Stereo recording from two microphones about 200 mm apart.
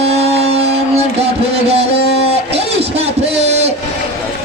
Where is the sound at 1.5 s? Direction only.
30° right (ahead or behind).